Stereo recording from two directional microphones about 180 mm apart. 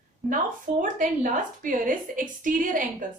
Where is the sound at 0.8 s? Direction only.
50° right (ahead or behind).